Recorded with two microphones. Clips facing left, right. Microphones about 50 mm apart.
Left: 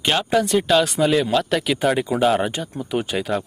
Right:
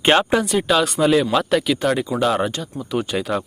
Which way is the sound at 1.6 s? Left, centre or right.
Centre.